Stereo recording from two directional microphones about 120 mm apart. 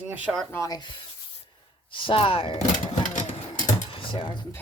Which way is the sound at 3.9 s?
45° left (ahead or behind).